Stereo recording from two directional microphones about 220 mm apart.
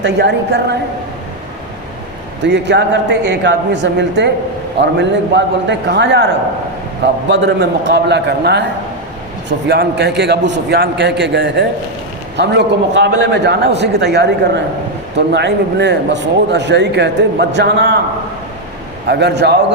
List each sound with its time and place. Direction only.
0.0 s a man's voice: 50° right (ahead or behind)
2.4 s a man's voice: 50° right (ahead or behind)
7.3 s a man's voice: 50° right (ahead or behind)
19.0 s a man's voice: 50° right (ahead or behind)